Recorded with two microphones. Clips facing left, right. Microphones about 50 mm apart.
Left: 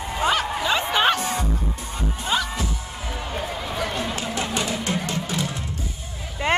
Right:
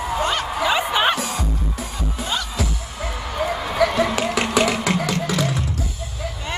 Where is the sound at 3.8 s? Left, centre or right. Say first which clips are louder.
Right 10 dB; right.